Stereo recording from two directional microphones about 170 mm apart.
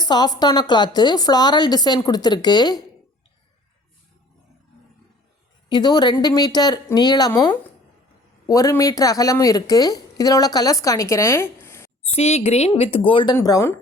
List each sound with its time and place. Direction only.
0.0 s a woman's voice: 25° left (ahead or behind)
5.6 s a woman's voice: 25° left (ahead or behind)
12.1 s speech: 40° left (ahead or behind)
13.3 s speech: 20° left (ahead or behind)